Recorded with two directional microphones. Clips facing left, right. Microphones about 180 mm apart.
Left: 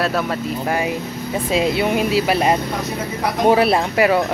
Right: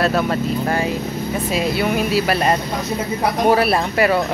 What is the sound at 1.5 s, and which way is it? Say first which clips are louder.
Speech: left 2 dB; 20° left (ahead or behind).